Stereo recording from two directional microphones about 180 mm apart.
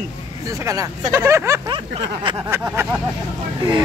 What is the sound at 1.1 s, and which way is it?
Speech, 15° right (ahead or behind).